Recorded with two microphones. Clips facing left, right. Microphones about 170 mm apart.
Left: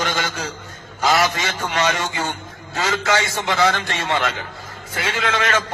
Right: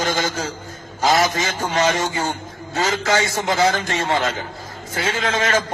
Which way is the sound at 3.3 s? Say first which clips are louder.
Right 1 dB; 40° right (ahead or behind).